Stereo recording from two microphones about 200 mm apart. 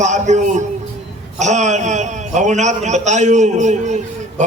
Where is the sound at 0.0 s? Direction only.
35° right (ahead or behind).